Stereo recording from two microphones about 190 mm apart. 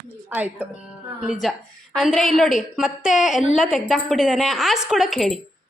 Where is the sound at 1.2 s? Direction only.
Centre (ahead or behind).